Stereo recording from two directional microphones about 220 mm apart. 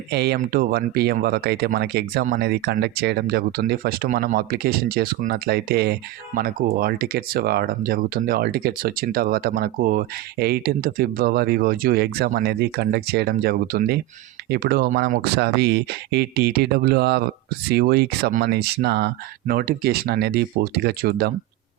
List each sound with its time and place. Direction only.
0.1 s speech: 45° right (ahead or behind)